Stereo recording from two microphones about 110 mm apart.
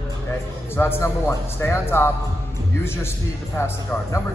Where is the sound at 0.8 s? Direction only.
25° left (ahead or behind).